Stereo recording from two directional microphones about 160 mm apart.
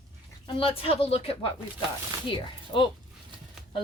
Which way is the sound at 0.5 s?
35° left (ahead or behind).